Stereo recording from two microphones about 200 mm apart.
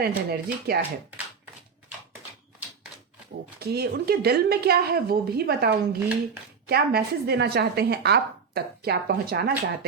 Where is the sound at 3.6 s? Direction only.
50° right (ahead or behind).